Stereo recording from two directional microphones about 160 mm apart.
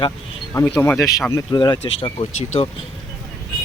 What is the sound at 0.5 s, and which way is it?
Speech, 15° left (ahead or behind).